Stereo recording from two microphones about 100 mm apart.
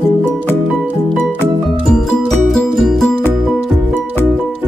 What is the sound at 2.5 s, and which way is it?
Music, centre (ahead or behind).